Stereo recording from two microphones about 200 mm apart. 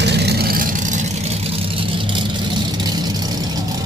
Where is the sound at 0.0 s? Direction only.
55° right (ahead or behind); by 3.4 s 20° right (ahead or behind).